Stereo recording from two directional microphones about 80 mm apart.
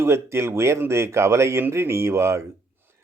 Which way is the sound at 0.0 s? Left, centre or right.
Right.